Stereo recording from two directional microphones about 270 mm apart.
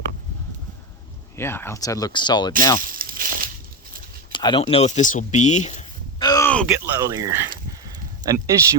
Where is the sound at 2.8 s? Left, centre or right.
Right.